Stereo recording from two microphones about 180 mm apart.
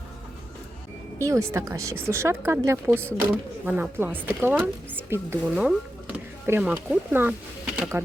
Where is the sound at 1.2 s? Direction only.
15° right (ahead or behind).